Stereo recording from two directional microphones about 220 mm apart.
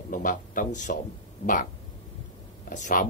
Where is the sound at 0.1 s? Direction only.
40° left (ahead or behind).